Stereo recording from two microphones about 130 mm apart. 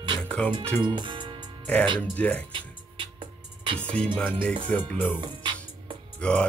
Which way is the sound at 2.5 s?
40° right (ahead or behind).